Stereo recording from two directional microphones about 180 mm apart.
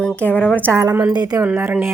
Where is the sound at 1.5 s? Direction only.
10° right (ahead or behind).